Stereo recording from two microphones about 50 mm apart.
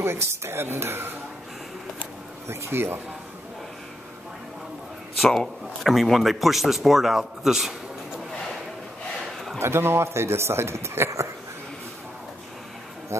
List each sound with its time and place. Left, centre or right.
0.0 s a man's voice: right
2.4 s a man's voice: right
5.2 s speech: centre
5.9 s speech: centre
9.6 s a man's voice: right
13.1 s speech: right